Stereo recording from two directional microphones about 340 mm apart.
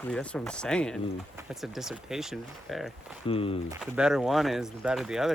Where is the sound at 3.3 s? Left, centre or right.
Centre.